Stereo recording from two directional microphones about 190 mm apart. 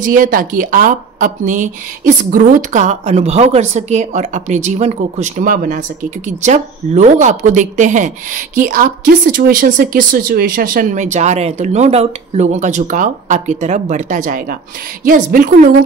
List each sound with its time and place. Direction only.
0.0 s a woman's voice: 45° right (ahead or behind)